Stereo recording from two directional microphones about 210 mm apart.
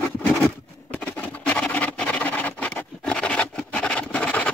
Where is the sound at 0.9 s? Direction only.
5° left (ahead or behind).